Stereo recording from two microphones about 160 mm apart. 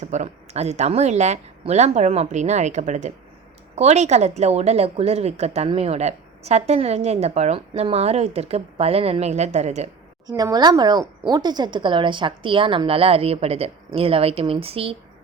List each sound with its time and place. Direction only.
0.0 s a woman's voice: 45° right (ahead or behind)
10.2 s a woman's voice: 25° right (ahead or behind)